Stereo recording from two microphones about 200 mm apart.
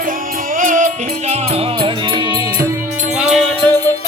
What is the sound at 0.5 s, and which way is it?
Music, 40° right (ahead or behind).